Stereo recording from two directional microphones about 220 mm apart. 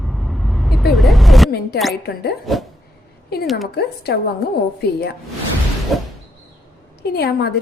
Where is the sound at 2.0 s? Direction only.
45° left (ahead or behind).